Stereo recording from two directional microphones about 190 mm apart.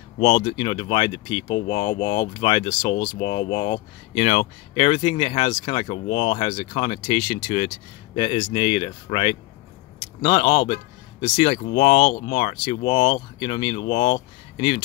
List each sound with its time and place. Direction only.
0.2 s speech: 30° left (ahead or behind)